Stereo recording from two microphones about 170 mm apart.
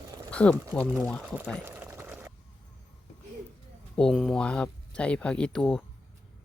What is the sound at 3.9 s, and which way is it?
Speech, centre (ahead or behind).